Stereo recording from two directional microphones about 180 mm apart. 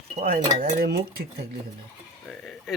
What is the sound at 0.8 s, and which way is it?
Speech, 60° right (ahead or behind).